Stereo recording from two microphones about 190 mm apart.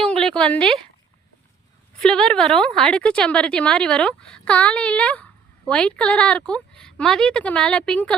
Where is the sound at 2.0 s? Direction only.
5° left (ahead or behind).